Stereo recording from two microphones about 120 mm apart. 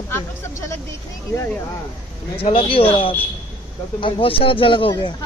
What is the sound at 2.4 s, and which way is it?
Speech, 50° left (ahead or behind).